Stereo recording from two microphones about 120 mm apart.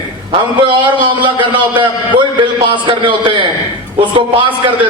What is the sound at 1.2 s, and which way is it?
A man's voice, 40° right (ahead or behind).